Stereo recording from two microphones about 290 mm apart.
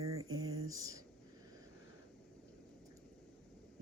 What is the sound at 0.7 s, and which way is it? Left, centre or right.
Speech, centre.